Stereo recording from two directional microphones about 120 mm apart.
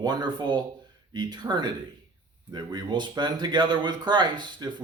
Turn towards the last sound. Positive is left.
turn(degrees=-40)  # may be behind; listen again after turning